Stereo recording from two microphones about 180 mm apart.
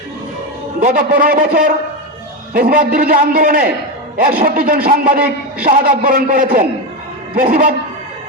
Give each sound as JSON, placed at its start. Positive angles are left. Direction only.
{"t": 0.8, "sound": "a man's voice", "side_deg": -45}